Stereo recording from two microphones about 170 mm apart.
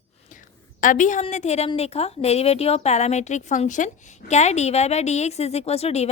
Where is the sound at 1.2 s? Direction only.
40° left (ahead or behind).